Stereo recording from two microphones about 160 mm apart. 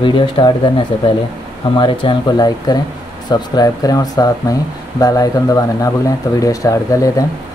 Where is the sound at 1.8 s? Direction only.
30° left (ahead or behind).